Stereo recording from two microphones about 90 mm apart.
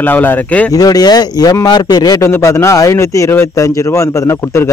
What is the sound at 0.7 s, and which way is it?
Speech, 45° left (ahead or behind).